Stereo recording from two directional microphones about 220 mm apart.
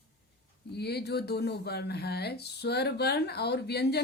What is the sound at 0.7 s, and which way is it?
Speech, 50° left (ahead or behind).